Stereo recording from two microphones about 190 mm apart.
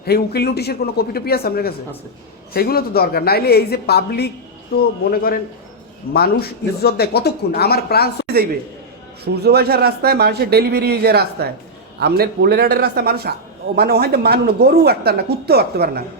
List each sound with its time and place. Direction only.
0.0 s a man's voice: 55° left (ahead or behind)
9.2 s a woman's voice: 60° right (ahead or behind)